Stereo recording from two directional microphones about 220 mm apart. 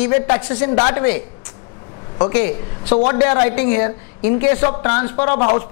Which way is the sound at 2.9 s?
30° left (ahead or behind).